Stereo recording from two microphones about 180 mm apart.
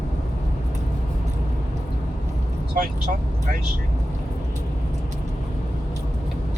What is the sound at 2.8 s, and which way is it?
Speech, 50° right (ahead or behind).